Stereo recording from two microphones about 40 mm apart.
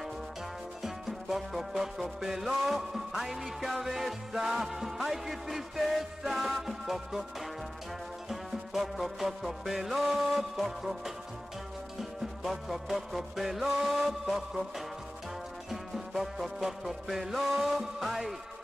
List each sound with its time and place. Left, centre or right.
0.8 s music: centre
8.3 s music: centre
15.7 s music: centre